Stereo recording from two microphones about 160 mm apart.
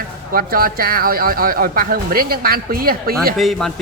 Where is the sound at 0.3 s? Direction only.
65° right (ahead or behind).